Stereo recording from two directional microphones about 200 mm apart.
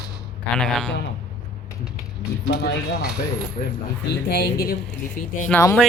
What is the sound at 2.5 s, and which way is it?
Speech, 55° left (ahead or behind).